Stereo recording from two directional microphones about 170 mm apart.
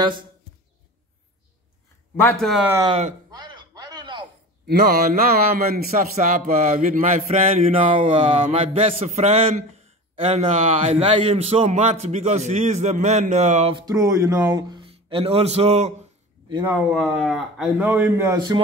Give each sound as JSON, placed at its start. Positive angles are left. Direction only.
{"t": 2.9, "sound": "mantra", "side_deg": -40}
{"t": 3.3, "sound": "chopping", "side_deg": -25}
{"t": 4.6, "sound": "speech", "side_deg": -65}
{"t": 5.9, "sound": "mantra", "side_deg": -50}
{"t": 13.7, "sound": "speech", "side_deg": -20}
{"t": 16.9, "sound": "speech", "side_deg": 0}